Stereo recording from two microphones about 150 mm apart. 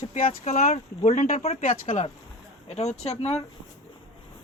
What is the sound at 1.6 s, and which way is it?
Speech, 60° left (ahead or behind).